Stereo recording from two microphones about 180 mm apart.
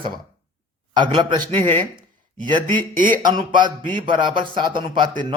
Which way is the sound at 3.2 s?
25° right (ahead or behind).